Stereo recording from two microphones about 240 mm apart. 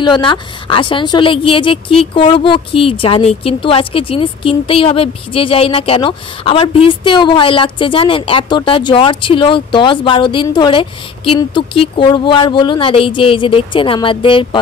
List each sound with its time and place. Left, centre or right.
0.0 s a woman's voice: centre